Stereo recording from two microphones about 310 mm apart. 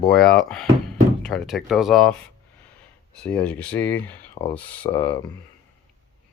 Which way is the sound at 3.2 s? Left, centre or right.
Centre.